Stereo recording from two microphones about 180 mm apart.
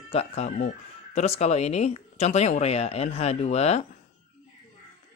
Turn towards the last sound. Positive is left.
turn(degrees=35)  # may be behind; listen again after turning